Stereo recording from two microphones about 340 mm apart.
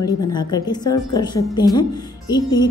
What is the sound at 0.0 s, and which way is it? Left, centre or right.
A woman's voice, centre.